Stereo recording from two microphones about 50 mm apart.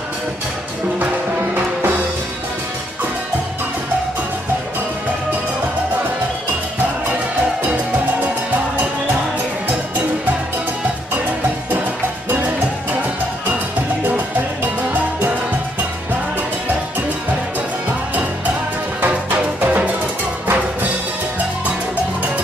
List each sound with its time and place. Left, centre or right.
14.0 s music: right
19.6 s music: right